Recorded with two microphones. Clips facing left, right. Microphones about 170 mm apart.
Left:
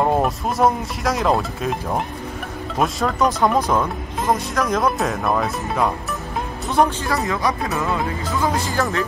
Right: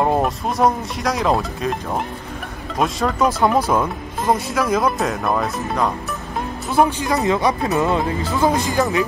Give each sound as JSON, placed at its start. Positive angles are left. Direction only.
{"t": 0.0, "sound": "speech", "side_deg": 0}